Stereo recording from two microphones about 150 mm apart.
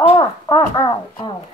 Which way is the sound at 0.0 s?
30° left (ahead or behind).